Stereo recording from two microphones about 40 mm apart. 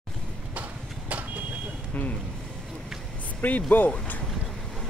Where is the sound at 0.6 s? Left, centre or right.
Right.